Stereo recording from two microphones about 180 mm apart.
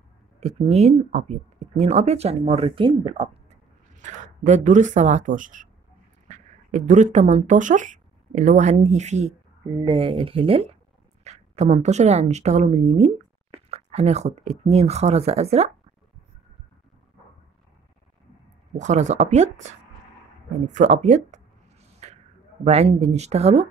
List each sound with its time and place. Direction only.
0.4 s speech: 35° right (ahead or behind)
9.8 s speech: 30° right (ahead or behind)
18.8 s speech: 40° right (ahead or behind)
22.0 s a sound: 40° right (ahead or behind)
22.7 s speech: 35° right (ahead or behind)